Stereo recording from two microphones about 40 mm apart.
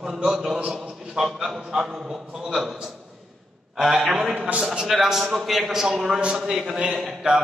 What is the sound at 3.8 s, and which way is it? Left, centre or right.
A man's voice, centre.